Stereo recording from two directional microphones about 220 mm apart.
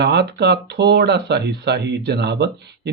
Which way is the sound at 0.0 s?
50° right (ahead or behind).